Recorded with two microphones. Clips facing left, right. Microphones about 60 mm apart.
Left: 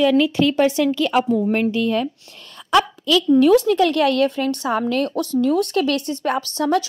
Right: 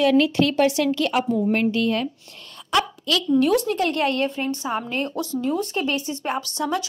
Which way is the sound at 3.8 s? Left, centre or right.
Left.